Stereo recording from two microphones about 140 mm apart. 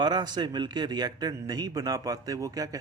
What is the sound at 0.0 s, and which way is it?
A man's voice, 30° right (ahead or behind).